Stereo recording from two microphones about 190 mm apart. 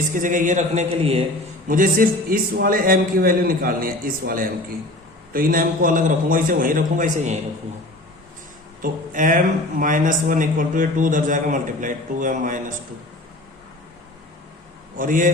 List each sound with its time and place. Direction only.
0.1 s a man's voice: 45° right (ahead or behind)
1.6 s speech: 45° right (ahead or behind)
8.8 s speech: 45° right (ahead or behind)
14.9 s speech: 45° right (ahead or behind)